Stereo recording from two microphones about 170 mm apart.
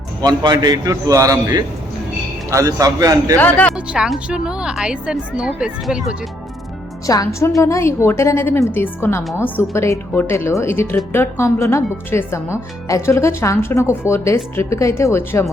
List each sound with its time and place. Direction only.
0.2 s a man's voice: 25° right (ahead or behind)
3.3 s speech: 10° left (ahead or behind)
3.8 s a woman's voice: 5° right (ahead or behind)
7.3 s speech: 15° left (ahead or behind)